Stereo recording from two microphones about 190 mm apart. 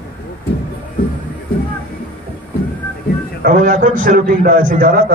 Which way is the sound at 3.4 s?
45° right (ahead or behind).